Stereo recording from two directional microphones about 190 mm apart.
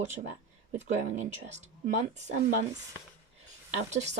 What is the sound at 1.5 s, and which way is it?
Speech, 40° right (ahead or behind).